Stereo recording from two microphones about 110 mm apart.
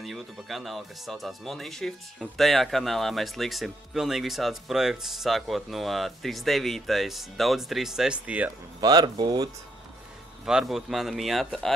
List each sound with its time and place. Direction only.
0.0 s speech: centre (ahead or behind)
8.8 s speech: 40° right (ahead or behind)
10.4 s speech: 5° right (ahead or behind)